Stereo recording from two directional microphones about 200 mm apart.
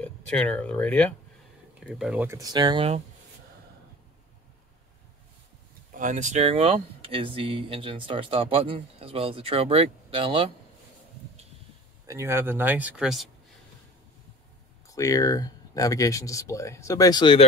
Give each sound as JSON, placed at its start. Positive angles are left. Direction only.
{"t": 0.0, "sound": "speech", "side_deg": 5}
{"t": 5.9, "sound": "speech", "side_deg": -40}
{"t": 12.1, "sound": "speech", "side_deg": -15}
{"t": 14.9, "sound": "speech", "side_deg": 15}